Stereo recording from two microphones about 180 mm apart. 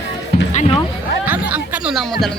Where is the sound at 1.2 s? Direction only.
10° right (ahead or behind).